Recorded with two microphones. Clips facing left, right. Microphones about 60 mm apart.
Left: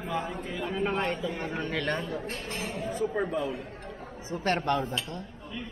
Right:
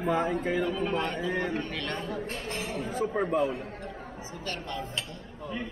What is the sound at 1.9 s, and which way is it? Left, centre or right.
Speech, centre.